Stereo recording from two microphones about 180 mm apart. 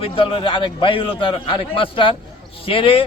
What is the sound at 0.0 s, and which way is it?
A man's voice, 30° left (ahead or behind).